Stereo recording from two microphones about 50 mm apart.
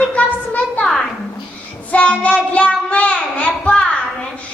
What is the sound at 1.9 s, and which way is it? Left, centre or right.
A child's voice, left.